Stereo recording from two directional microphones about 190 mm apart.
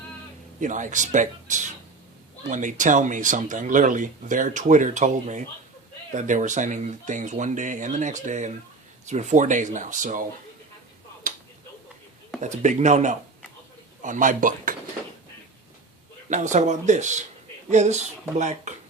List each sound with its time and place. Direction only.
0.6 s speech: 40° right (ahead or behind)
12.4 s speech: 40° right (ahead or behind)
16.3 s speech: 40° right (ahead or behind)